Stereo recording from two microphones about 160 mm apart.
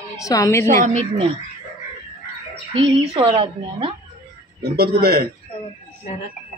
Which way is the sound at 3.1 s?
35° right (ahead or behind).